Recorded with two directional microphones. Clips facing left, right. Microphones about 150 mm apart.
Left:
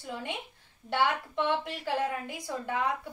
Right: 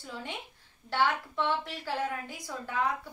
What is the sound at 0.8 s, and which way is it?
A woman's voice, 20° left (ahead or behind).